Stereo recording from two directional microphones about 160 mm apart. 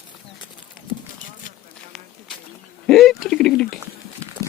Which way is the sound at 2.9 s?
Centre (ahead or behind).